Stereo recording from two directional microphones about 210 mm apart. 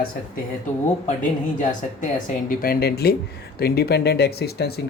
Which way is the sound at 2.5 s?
45° left (ahead or behind).